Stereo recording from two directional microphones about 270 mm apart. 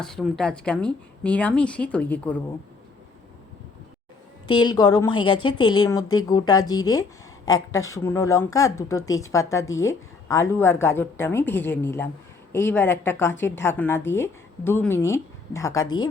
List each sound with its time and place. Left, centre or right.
0.0 s speech: centre
4.6 s speech: centre